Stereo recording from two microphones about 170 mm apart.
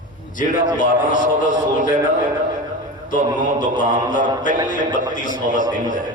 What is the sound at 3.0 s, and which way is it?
A man's voice, 50° left (ahead or behind).